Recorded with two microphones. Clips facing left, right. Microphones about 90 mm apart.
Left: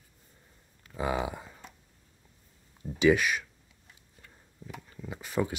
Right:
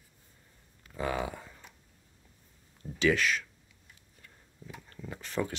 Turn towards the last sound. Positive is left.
turn(degrees=10)  # may be behind; listen again after turning